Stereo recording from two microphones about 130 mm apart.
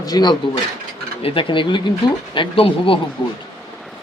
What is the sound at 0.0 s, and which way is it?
Speech, 30° left (ahead or behind).